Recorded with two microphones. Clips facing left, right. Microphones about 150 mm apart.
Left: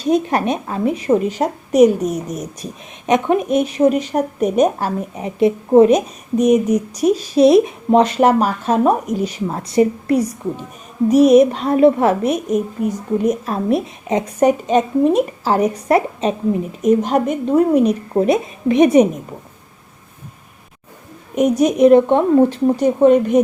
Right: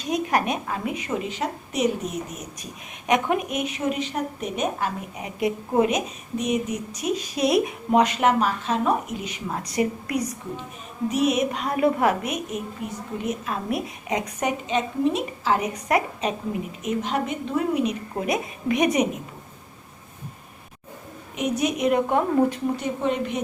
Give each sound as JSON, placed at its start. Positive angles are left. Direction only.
{"t": 0.0, "sound": "a woman's voice", "side_deg": 30}
{"t": 14.7, "sound": "a woman's voice", "side_deg": 45}
{"t": 21.3, "sound": "a woman's voice", "side_deg": 40}
{"t": 22.6, "sound": "speech", "side_deg": 45}